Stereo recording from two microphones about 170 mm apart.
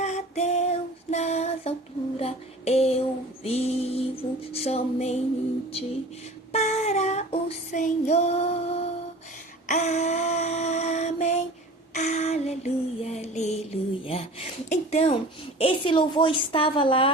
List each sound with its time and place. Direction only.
0.0 s female singing: 40° left (ahead or behind)
2.1 s music: 35° left (ahead or behind)
6.5 s female singing: 40° left (ahead or behind)
9.6 s a sound: 45° left (ahead or behind)
11.9 s female singing: 45° left (ahead or behind)